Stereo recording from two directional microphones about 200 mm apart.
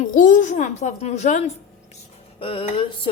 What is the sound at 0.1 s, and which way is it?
A woman's voice, 40° left (ahead or behind).